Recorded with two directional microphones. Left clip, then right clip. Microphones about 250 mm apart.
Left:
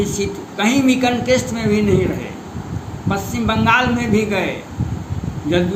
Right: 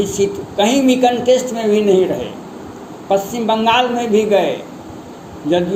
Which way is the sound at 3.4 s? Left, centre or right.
Left.